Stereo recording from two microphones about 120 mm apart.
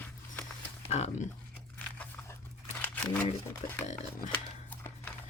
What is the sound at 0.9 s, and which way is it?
Speech, 65° left (ahead or behind).